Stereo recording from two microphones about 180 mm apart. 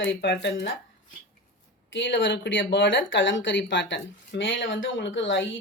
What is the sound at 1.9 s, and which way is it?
Speech, 90° left.